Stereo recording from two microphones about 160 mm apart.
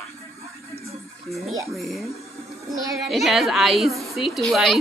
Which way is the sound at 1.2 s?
Centre (ahead or behind).